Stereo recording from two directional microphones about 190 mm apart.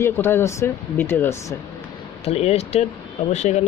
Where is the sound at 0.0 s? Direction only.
10° left (ahead or behind).